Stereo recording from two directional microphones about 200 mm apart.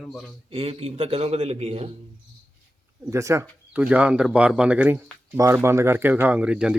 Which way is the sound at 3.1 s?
15° right (ahead or behind).